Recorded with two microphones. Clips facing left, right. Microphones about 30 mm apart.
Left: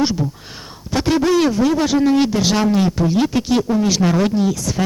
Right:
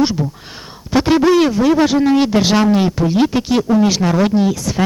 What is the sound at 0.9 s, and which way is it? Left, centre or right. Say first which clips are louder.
Speech: right 4 dB; centre.